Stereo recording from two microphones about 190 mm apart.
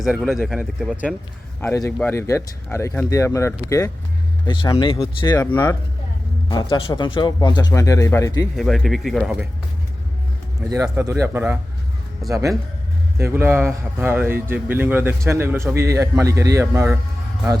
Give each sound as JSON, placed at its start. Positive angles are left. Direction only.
{"t": 0.0, "sound": "speech", "side_deg": 0}
{"t": 1.6, "sound": "speech", "side_deg": 15}
{"t": 6.5, "sound": "speech", "side_deg": 25}
{"t": 8.5, "sound": "speech", "side_deg": 0}
{"t": 10.8, "sound": "speech", "side_deg": -10}